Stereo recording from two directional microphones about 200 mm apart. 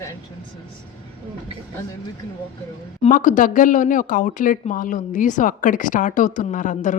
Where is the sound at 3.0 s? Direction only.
40° left (ahead or behind).